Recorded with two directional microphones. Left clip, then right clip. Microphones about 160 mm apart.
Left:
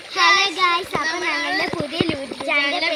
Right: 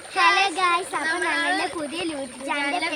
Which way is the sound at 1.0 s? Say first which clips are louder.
Left 1 dB; 5° left (ahead or behind).